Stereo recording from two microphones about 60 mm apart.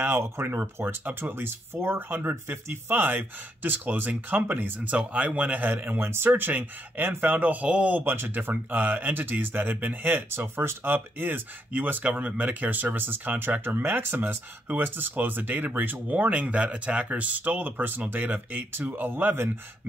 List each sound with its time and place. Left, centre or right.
0.2 s speech: right
8.0 s speech: right